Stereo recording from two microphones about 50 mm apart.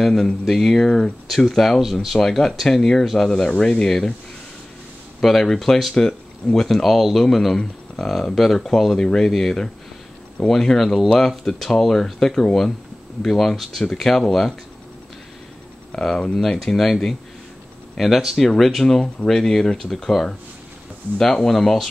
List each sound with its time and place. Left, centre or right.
0.0 s speech: centre
1.3 s speech: centre
1.8 s speech: centre
2.1 s speech: centre
5.2 s speech: centre
15.9 s speech: centre
16.3 s speech: centre